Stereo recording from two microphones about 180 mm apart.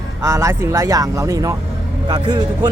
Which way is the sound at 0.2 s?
15° right (ahead or behind).